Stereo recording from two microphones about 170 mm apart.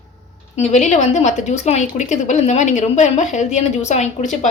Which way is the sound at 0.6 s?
45° left (ahead or behind).